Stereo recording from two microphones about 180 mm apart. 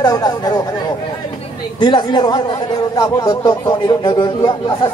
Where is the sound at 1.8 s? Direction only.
25° left (ahead or behind).